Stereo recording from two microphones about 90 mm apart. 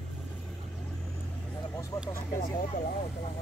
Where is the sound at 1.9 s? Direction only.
35° left (ahead or behind).